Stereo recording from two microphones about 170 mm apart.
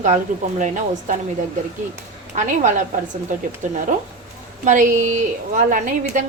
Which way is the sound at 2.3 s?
45° right (ahead or behind).